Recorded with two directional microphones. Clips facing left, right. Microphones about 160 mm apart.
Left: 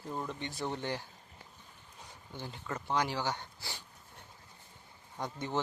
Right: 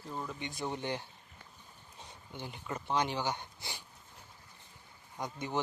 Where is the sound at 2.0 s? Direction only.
20° right (ahead or behind).